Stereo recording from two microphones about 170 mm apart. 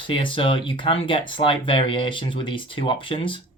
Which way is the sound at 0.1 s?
30° left (ahead or behind).